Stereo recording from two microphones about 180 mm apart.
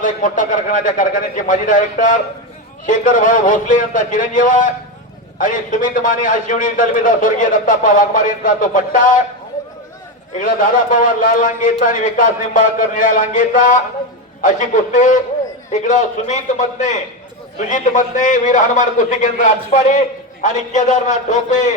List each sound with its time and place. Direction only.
0.0 s a man's voice: 45° left (ahead or behind)
10.3 s a man's voice: 45° left (ahead or behind)